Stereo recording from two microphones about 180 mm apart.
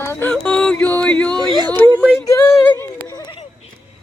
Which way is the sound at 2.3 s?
15° left (ahead or behind).